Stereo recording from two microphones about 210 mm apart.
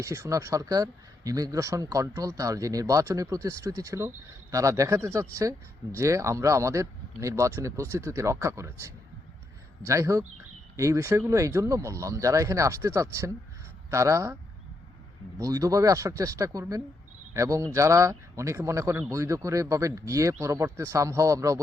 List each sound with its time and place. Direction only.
0.0 s speech: 15° right (ahead or behind)
15.4 s speech: 15° right (ahead or behind)